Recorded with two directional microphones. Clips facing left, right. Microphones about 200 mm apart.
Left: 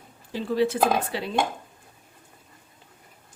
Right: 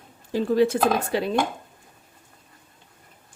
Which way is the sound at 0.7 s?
45° right (ahead or behind).